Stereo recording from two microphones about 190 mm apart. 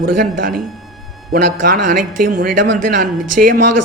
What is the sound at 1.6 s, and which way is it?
A man's voice, 45° right (ahead or behind).